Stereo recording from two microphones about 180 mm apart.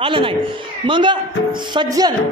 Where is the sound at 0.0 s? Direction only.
30° right (ahead or behind).